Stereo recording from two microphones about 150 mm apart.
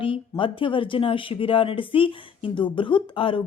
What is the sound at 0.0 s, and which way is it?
Speech, 35° left (ahead or behind).